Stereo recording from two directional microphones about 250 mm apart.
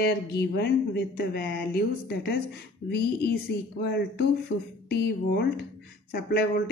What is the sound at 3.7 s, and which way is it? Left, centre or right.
Speech, left.